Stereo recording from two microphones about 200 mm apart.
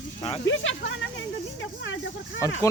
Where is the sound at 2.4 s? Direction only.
15° left (ahead or behind).